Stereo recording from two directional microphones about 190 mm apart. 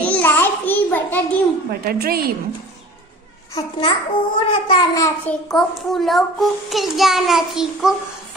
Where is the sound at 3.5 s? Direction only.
25° left (ahead or behind).